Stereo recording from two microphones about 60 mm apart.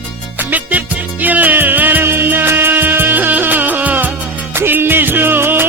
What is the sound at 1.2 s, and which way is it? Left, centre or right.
Music, right.